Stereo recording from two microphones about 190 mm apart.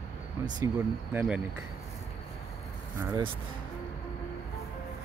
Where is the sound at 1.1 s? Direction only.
5° right (ahead or behind).